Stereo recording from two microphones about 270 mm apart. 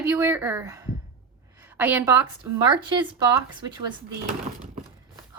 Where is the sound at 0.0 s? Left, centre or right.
Centre.